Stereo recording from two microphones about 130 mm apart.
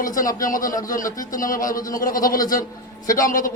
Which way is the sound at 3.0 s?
90° left.